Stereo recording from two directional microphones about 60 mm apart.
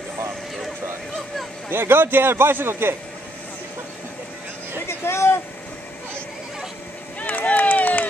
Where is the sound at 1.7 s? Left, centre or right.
Right.